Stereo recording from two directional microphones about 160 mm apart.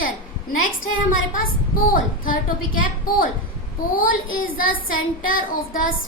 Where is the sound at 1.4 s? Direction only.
60° left (ahead or behind).